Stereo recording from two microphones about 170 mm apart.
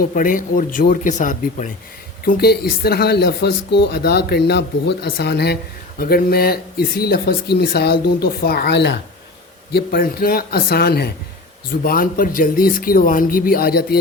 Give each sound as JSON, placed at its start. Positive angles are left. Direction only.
{"t": 0.0, "sound": "speech", "side_deg": 55}
{"t": 2.2, "sound": "speech", "side_deg": 65}
{"t": 6.0, "sound": "speech", "side_deg": 65}
{"t": 9.7, "sound": "speech", "side_deg": 65}